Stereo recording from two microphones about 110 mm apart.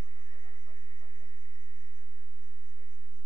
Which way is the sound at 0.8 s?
45° left (ahead or behind).